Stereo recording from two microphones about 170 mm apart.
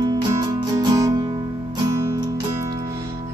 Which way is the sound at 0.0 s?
20° right (ahead or behind).